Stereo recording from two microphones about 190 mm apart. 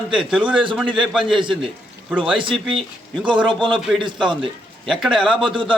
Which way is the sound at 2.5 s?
5° right (ahead or behind).